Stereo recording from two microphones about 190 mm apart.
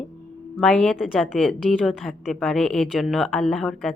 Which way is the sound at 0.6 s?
5° left (ahead or behind).